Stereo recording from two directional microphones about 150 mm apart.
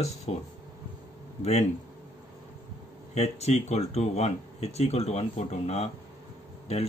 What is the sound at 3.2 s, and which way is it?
Speech, 45° left (ahead or behind).